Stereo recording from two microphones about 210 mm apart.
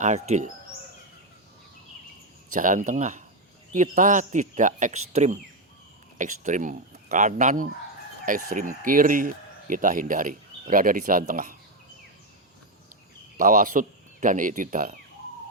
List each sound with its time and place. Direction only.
0.0 s speech: 35° right (ahead or behind)
2.5 s speech: 40° right (ahead or behind)
13.3 s speech: 40° right (ahead or behind)